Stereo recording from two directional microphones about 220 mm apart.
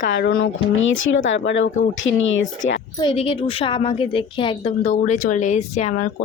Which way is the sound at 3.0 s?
25° left (ahead or behind).